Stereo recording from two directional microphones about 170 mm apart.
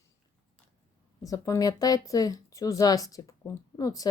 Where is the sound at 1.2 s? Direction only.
20° left (ahead or behind).